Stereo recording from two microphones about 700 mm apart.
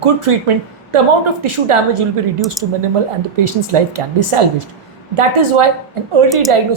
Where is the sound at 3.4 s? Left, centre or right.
Right.